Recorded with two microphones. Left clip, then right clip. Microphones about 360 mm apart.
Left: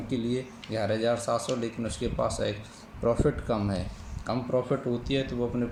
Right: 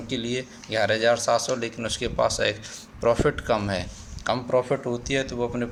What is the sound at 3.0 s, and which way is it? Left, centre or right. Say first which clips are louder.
Speech: right 5 dB; right.